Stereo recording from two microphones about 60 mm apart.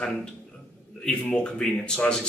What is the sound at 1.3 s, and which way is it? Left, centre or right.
Speech, centre.